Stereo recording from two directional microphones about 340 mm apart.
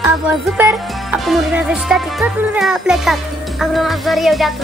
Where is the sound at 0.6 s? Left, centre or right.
Centre.